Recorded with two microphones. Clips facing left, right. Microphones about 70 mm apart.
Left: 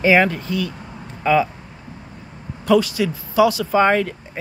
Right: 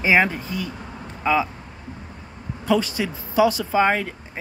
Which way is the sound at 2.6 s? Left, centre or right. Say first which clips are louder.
Left 5 dB; right.